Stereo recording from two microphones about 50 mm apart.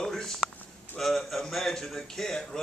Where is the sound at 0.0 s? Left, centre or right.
Centre.